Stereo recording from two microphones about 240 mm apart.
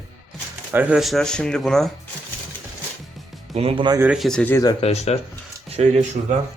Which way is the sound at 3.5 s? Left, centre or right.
Right.